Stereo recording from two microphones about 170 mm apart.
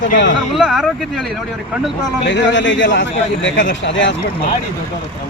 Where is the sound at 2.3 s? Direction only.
90° left.